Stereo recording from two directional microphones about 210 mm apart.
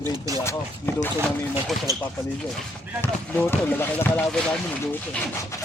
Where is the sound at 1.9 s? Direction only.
15° right (ahead or behind).